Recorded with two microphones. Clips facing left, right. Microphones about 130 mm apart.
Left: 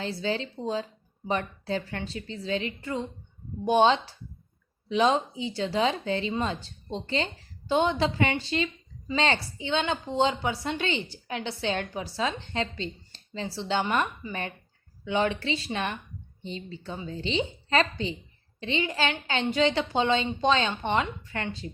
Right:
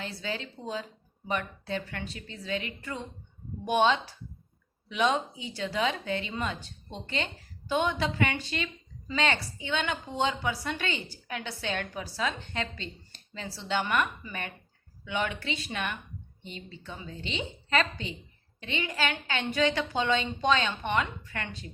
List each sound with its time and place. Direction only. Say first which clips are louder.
0.0 s a woman's voice: left 6 dB; 30° left (ahead or behind)